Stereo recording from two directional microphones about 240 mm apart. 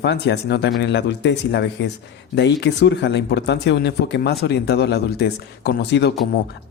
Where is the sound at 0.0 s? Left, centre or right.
Left.